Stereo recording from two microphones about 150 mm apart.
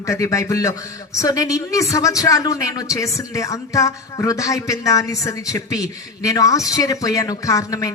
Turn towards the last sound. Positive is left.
turn(degrees=25)  # may be behind; listen again after turning